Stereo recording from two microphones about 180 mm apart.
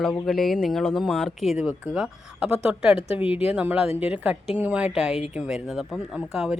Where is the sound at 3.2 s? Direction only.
30° left (ahead or behind).